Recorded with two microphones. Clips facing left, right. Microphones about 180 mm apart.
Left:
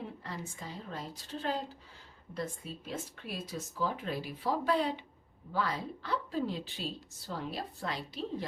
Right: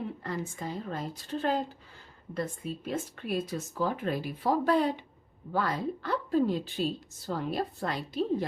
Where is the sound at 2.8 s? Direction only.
55° right (ahead or behind).